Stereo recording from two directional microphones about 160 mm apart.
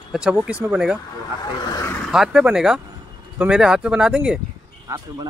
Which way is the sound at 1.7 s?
15° left (ahead or behind).